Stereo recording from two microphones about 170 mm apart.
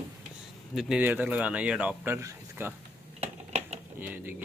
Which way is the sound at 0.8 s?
5° right (ahead or behind).